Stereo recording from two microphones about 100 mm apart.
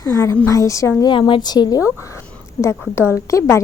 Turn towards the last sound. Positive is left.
turn(degrees=30)  # may be behind; listen again after turning